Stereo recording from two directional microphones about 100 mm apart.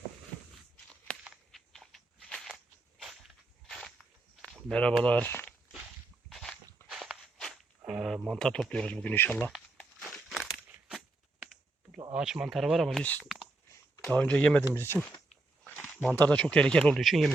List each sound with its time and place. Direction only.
1.5 s walk: 5° left (ahead or behind)
3.7 s whip: 5° left (ahead or behind)
4.5 s speech: 10° left (ahead or behind)
6.3 s walk: 5° left (ahead or behind); by 9.5 s 20° left (ahead or behind)
10.0 s crumpling: 5° right (ahead or behind)
12.1 s speech: 5° right (ahead or behind)
13.0 s speech: 15° left (ahead or behind)
14.7 s speech: 20° left (ahead or behind)
16.1 s speech: 15° left (ahead or behind)